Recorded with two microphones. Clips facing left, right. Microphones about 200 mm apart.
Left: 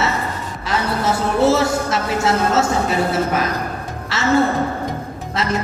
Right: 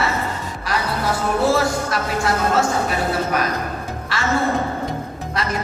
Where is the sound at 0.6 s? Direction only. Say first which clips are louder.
Left 3 dB; 25° left (ahead or behind).